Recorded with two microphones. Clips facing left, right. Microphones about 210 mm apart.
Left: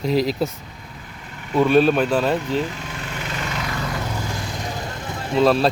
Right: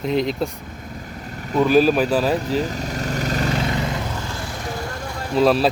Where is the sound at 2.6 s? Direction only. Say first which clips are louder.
Right 2 dB; 40° right (ahead or behind).